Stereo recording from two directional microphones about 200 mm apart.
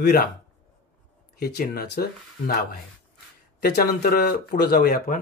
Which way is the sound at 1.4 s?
45° left (ahead or behind).